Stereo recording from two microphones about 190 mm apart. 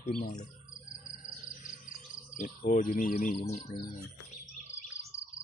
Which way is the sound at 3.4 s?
40° left (ahead or behind).